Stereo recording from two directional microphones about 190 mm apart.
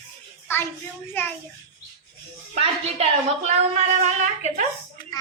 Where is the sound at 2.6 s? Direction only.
35° right (ahead or behind).